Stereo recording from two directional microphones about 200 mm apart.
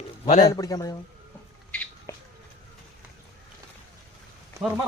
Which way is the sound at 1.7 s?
5° left (ahead or behind).